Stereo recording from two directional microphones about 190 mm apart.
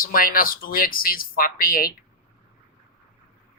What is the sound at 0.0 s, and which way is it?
Speech, 50° left (ahead or behind).